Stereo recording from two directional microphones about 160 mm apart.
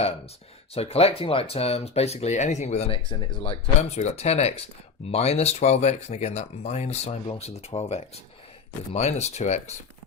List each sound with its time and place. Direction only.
0.7 s speech: 40° left (ahead or behind)